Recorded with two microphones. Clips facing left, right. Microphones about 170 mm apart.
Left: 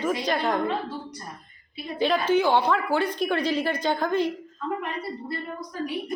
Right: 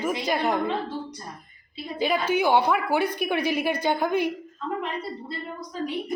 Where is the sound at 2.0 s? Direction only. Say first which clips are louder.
Left 2 dB; 10° right (ahead or behind).